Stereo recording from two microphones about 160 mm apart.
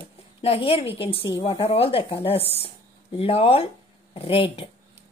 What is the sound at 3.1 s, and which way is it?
A woman's voice, 35° left (ahead or behind).